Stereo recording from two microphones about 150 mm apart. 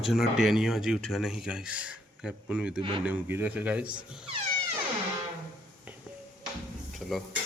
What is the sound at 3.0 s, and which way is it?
Speech, 10° right (ahead or behind).